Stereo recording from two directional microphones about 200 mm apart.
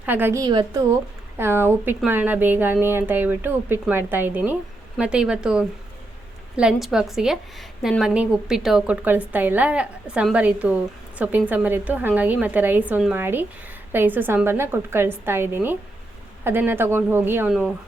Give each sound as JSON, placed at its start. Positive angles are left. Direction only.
{"t": 0.0, "sound": "a woman's voice", "side_deg": -10}